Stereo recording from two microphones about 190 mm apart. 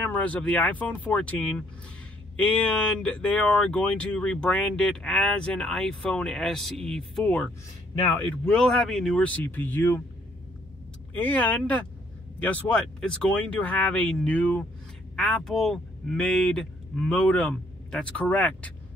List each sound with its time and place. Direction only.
0.0 s speech: 5° left (ahead or behind)
11.2 s speech: 10° left (ahead or behind)